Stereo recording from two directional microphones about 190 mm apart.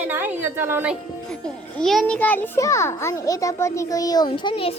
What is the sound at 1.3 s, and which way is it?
A child's voice, 5° left (ahead or behind).